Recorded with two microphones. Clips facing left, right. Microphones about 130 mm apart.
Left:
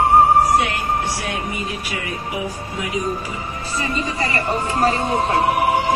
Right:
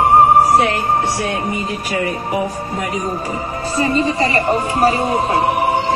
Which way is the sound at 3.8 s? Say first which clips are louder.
Right 8 dB; 35° right (ahead or behind).